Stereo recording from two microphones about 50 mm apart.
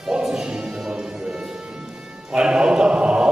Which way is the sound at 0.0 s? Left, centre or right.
Centre.